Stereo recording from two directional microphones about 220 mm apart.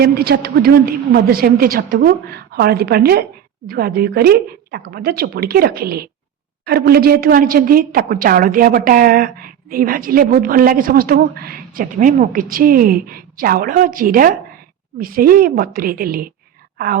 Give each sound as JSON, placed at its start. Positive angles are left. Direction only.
{"t": 0.0, "sound": "a woman's voice", "side_deg": -45}